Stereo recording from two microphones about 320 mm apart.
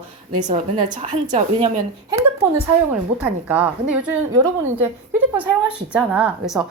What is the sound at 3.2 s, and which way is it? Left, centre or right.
A woman's voice, centre.